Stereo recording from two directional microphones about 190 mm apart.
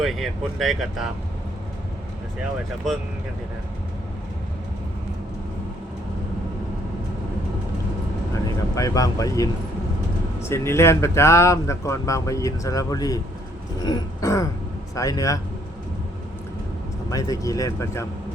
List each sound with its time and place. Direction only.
0.0 s speech: centre (ahead or behind)
8.7 s speech: 20° left (ahead or behind)
10.5 s speech: 15° left (ahead or behind)
17.1 s speech: 20° left (ahead or behind)